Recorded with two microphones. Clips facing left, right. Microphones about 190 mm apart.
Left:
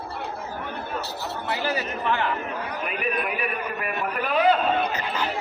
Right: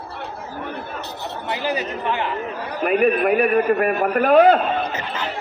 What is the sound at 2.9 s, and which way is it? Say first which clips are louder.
A man's voice: right 13 dB; 45° right (ahead or behind).